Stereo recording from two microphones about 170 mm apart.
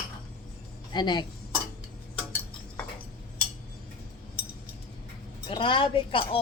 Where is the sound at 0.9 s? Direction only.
25° left (ahead or behind).